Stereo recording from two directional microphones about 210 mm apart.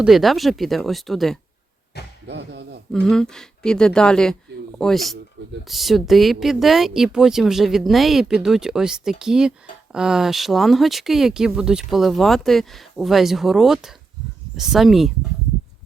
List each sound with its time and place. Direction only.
0.0 s speech: centre (ahead or behind)
2.2 s music: 55° right (ahead or behind)
2.9 s speech: 5° left (ahead or behind)